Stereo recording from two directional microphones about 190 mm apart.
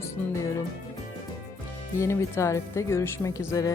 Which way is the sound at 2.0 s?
15° left (ahead or behind).